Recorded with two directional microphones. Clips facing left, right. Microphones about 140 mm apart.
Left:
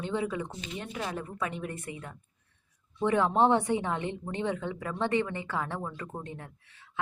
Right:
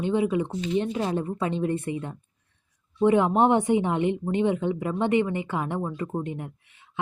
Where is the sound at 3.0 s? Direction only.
15° right (ahead or behind).